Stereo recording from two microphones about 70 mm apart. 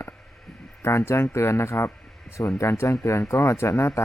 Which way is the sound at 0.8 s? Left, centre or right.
Left.